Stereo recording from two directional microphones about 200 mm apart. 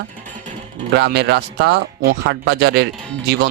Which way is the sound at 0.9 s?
55° right (ahead or behind).